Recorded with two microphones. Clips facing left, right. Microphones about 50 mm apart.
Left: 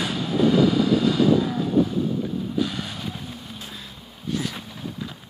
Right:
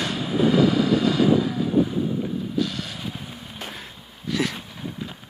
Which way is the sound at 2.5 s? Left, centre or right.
Centre.